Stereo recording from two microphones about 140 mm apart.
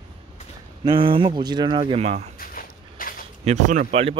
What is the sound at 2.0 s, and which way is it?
Speech, 55° right (ahead or behind).